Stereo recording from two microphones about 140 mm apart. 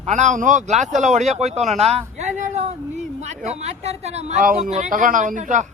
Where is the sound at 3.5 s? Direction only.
50° right (ahead or behind).